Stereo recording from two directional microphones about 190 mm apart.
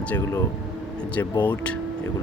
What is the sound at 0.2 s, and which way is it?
Speech, 15° left (ahead or behind).